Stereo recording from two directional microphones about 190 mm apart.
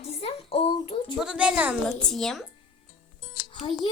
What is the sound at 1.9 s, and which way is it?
Speech, 5° left (ahead or behind).